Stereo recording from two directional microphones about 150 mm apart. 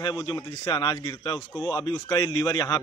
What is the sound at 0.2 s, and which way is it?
A man's voice, 30° left (ahead or behind).